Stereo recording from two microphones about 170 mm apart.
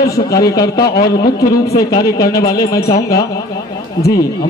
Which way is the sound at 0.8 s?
65° left (ahead or behind).